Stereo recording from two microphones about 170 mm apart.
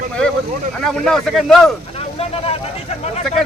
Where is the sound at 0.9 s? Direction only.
Centre (ahead or behind).